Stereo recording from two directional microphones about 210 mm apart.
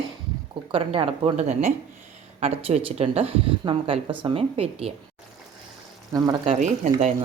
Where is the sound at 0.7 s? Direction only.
25° right (ahead or behind).